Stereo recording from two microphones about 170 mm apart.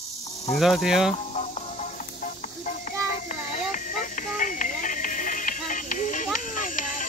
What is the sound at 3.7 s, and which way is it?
Music, 50° left (ahead or behind).